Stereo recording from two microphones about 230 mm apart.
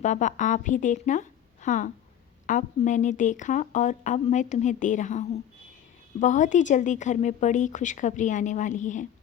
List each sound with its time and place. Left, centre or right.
0.0 s a woman's voice: left